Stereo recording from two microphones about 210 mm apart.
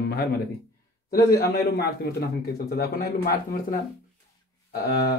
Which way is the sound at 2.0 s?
50° left (ahead or behind).